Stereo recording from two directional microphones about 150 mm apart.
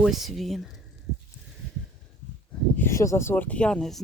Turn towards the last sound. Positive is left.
turn(degrees=5)  # may be behind; listen again after turning